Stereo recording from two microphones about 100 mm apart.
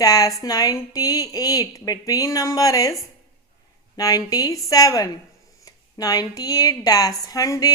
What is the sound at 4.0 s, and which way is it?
Speech, 40° left (ahead or behind).